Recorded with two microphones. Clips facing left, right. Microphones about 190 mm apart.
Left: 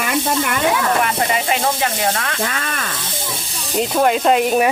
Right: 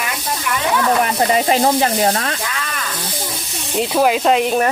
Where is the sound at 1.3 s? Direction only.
35° right (ahead or behind).